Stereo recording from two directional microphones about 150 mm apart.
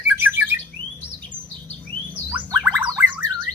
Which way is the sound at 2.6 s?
10° right (ahead or behind).